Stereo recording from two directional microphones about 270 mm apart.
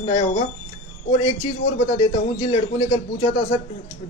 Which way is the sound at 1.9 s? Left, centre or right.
Left.